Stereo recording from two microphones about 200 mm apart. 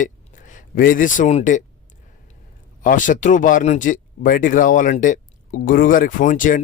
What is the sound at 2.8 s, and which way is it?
A man's voice, 40° left (ahead or behind).